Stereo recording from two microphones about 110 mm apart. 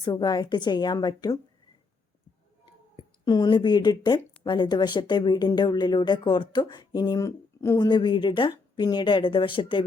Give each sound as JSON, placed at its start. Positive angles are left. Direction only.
{"t": 0.0, "sound": "speech", "side_deg": 40}
{"t": 3.2, "sound": "speech", "side_deg": 40}